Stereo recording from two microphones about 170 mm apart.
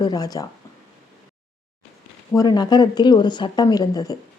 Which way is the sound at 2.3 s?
20° left (ahead or behind).